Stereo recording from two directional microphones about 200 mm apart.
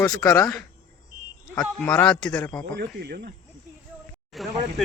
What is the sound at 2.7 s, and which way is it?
Speech, 55° right (ahead or behind).